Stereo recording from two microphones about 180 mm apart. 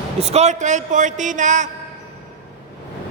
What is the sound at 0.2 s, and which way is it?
A man's voice, 40° right (ahead or behind).